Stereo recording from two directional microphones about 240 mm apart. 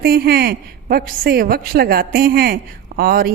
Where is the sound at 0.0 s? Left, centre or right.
Right.